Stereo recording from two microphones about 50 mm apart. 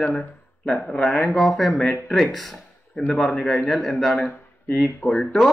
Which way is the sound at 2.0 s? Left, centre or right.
Centre.